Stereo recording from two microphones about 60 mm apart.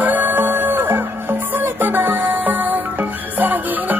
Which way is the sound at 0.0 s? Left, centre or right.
Right.